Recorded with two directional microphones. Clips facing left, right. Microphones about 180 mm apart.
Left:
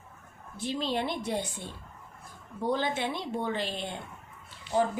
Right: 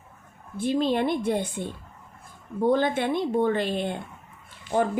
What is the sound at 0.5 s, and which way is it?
A woman's voice, 50° right (ahead or behind).